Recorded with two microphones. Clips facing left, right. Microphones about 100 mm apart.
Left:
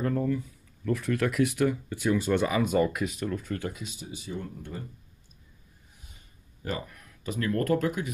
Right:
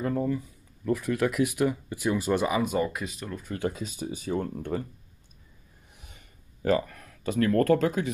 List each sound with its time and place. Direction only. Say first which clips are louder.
0.0 s speech: even; 10° right (ahead or behind)
3.5 s speech: right 4 dB; 30° right (ahead or behind)
3.8 s speech: right 6 dB; 45° right (ahead or behind)
6.6 s speech: right 10 dB; 75° right (ahead or behind)
7.2 s speech: right 5 dB; 65° right (ahead or behind)